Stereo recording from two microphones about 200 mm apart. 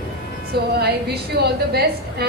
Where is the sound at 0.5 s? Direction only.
55° right (ahead or behind).